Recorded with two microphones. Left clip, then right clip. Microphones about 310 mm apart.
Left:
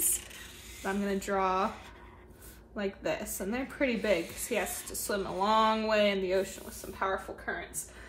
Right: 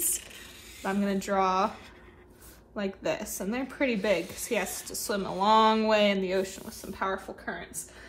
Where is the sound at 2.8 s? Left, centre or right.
Centre.